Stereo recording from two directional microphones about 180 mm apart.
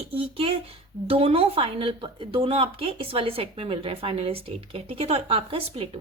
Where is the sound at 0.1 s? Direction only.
30° right (ahead or behind).